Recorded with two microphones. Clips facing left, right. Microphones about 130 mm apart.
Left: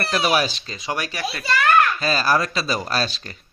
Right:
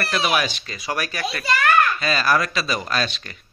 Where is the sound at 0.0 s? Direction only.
30° left (ahead or behind).